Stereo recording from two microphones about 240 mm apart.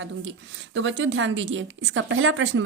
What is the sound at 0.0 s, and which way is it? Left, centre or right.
Speech, right.